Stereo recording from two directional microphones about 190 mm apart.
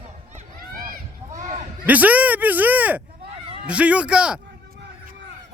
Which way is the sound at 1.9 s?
10° right (ahead or behind).